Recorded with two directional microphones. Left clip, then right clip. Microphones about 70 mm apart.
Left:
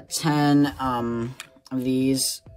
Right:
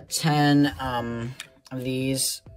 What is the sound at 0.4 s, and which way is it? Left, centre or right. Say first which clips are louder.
Speech: even; left.